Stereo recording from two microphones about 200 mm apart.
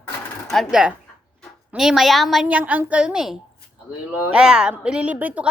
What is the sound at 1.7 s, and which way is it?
A woman's voice, centre (ahead or behind).